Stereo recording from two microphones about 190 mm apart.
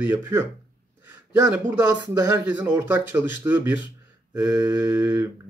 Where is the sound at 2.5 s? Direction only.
10° right (ahead or behind).